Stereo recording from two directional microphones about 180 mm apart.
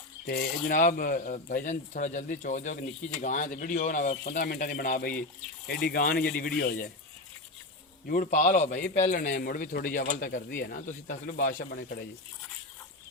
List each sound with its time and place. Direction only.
0.3 s a man's voice: 55° left (ahead or behind)
8.0 s a man's voice: 50° left (ahead or behind)